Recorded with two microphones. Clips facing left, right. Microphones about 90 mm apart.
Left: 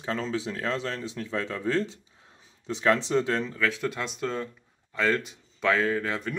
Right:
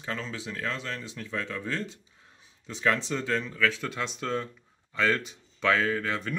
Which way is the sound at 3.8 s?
5° left (ahead or behind).